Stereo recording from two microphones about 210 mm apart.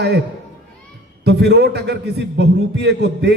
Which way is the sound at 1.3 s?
55° right (ahead or behind).